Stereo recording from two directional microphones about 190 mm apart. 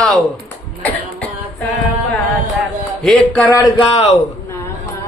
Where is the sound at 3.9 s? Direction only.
35° left (ahead or behind).